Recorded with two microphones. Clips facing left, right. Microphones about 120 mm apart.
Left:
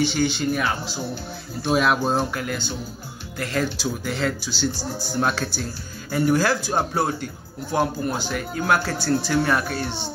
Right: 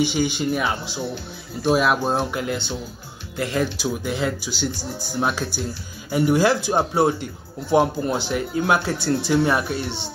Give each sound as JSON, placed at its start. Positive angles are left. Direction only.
{"t": 0.0, "sound": "a man's voice", "side_deg": -15}
{"t": 1.6, "sound": "speech", "side_deg": -5}
{"t": 2.3, "sound": "speech", "side_deg": -20}
{"t": 6.1, "sound": "speech", "side_deg": -20}